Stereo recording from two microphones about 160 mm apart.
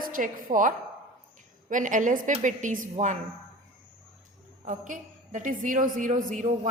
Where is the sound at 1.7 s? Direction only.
50° right (ahead or behind).